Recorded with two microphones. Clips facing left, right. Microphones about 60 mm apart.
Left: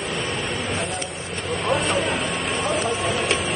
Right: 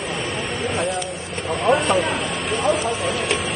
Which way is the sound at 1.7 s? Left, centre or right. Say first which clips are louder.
Right 5 dB; centre.